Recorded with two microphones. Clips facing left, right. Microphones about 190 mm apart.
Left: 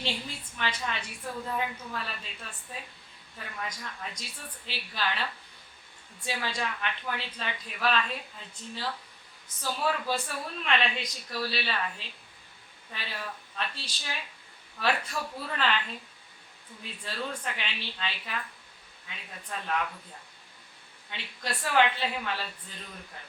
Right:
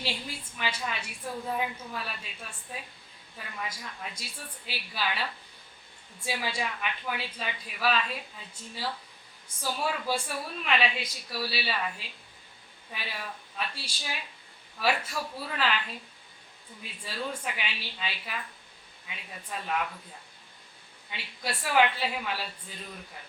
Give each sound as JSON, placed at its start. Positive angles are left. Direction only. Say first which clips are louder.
{"t": 0.0, "sound": "a woman's voice", "louder": "left 1 dB", "side_deg": -5}
{"t": 6.2, "sound": "a woman's voice", "louder": "even", "side_deg": -10}
{"t": 9.6, "sound": "a woman's voice", "louder": "left 1 dB", "side_deg": -10}
{"t": 13.6, "sound": "a woman's voice", "louder": "right 1 dB", "side_deg": -10}
{"t": 17.0, "sound": "a woman's voice", "louder": "right 1 dB", "side_deg": -10}
{"t": 21.1, "sound": "a woman's voice", "louder": "right 1 dB", "side_deg": -10}